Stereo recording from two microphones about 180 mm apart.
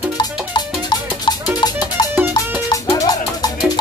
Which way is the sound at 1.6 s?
25° left (ahead or behind).